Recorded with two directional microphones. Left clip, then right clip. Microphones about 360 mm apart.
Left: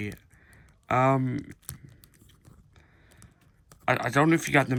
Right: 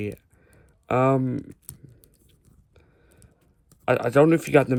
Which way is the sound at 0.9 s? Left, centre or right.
Right.